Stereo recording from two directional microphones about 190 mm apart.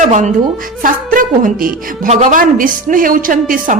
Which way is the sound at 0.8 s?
45° right (ahead or behind).